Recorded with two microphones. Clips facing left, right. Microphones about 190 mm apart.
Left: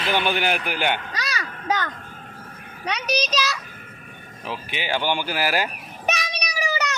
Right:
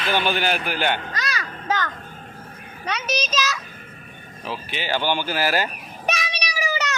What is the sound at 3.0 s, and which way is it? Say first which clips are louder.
Speech: left 2 dB; 15° left (ahead or behind).